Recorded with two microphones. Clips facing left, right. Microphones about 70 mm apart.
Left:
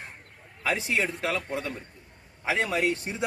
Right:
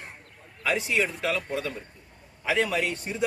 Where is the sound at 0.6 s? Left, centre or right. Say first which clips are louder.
Right 1 dB; left.